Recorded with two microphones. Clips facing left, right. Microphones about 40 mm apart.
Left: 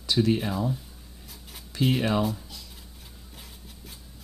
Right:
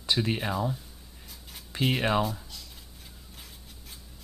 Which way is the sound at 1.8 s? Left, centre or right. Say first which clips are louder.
Left 3 dB; centre.